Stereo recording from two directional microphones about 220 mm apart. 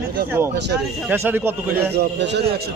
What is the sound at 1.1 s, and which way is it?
Speech, 10° right (ahead or behind).